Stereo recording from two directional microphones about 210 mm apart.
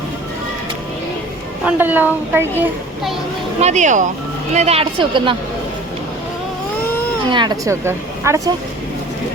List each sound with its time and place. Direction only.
1.6 s a woman's voice: 10° right (ahead or behind)
3.6 s a woman's voice: 35° right (ahead or behind)
7.3 s a woman's voice: 20° right (ahead or behind)